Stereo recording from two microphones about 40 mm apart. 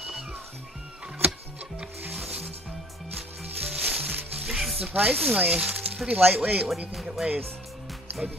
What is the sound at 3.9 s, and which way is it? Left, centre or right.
Music, right.